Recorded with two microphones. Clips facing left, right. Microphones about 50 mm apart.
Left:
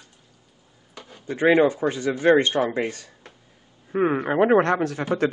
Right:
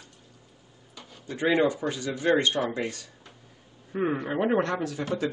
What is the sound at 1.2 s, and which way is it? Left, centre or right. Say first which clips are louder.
Speech: left 6 dB; left.